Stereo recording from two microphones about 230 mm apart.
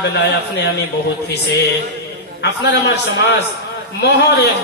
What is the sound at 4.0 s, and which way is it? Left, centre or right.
Speech, left.